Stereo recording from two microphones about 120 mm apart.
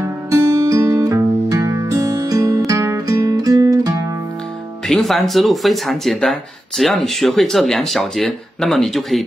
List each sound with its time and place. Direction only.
0.0 s music: 25° right (ahead or behind)
4.8 s speech: 5° left (ahead or behind)